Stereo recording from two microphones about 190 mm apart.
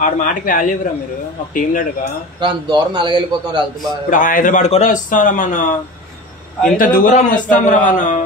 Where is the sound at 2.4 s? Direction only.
25° right (ahead or behind).